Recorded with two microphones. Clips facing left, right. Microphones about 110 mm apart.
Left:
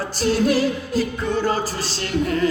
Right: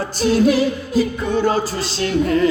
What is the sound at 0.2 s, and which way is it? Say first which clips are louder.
Music: right 3 dB; 20° right (ahead or behind).